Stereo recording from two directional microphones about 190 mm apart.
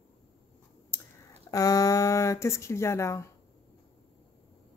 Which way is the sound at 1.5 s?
20° left (ahead or behind).